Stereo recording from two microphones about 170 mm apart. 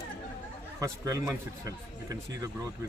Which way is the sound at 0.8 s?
20° right (ahead or behind).